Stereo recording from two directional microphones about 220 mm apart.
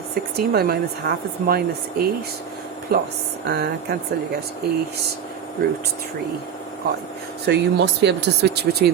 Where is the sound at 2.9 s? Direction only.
45° right (ahead or behind).